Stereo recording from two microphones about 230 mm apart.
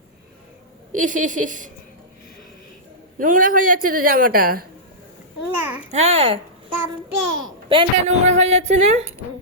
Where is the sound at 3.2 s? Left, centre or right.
Right.